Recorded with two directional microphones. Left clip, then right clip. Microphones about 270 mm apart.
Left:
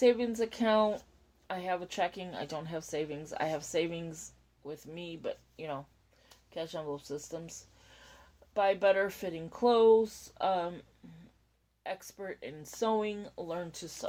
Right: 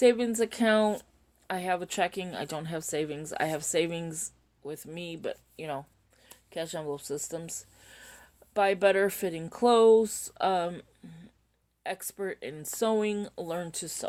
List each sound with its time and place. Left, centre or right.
0.0 s a woman's voice: right